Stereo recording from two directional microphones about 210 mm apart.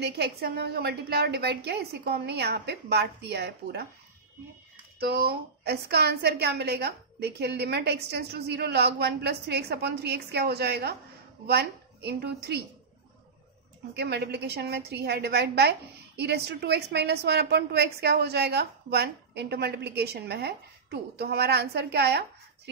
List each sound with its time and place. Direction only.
0.0 s a woman's voice: 50° right (ahead or behind)
5.0 s a woman's voice: 50° right (ahead or behind)
13.9 s a woman's voice: 50° right (ahead or behind)